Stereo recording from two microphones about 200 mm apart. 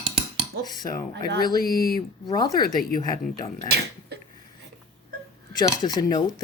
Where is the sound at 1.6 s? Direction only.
50° left (ahead or behind).